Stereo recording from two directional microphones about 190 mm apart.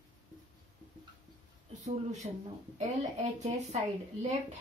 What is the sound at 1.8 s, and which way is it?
A woman's voice, 35° right (ahead or behind).